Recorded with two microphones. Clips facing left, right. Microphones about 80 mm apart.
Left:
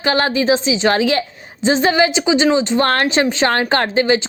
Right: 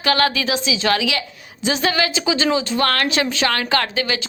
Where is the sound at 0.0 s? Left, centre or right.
Left.